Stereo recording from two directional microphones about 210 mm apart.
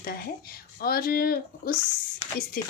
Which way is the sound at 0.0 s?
45° left (ahead or behind).